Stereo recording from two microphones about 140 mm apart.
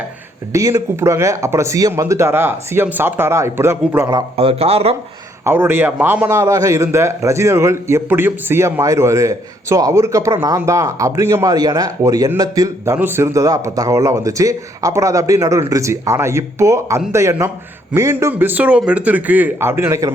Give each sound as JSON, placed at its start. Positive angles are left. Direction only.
{"t": 0.5, "sound": "a man's voice", "side_deg": -20}
{"t": 4.4, "sound": "speech", "side_deg": -45}
{"t": 5.5, "sound": "a man's voice", "side_deg": -15}